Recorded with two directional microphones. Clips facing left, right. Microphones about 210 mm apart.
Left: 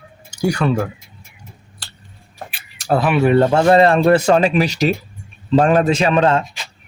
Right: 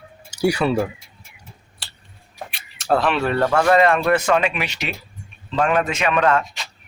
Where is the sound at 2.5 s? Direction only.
5° left (ahead or behind).